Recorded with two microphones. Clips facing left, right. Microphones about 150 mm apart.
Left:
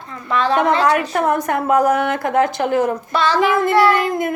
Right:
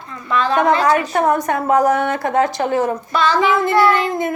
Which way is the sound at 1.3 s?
55° left (ahead or behind).